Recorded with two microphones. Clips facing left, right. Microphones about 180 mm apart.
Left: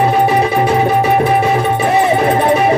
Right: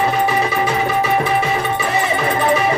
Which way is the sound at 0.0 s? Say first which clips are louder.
Left 5 dB; 55° left (ahead or behind).